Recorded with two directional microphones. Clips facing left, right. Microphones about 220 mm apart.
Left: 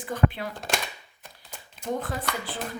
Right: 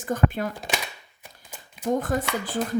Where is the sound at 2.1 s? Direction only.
45° right (ahead or behind).